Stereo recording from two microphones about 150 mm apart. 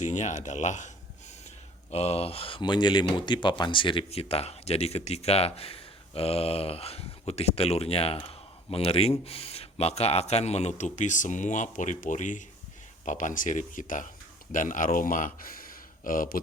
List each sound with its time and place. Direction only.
0.1 s speech: 55° left (ahead or behind)
1.9 s speech: 45° left (ahead or behind); by 16.4 s 65° left (ahead or behind)